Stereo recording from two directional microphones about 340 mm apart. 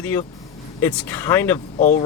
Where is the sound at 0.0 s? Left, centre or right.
Centre.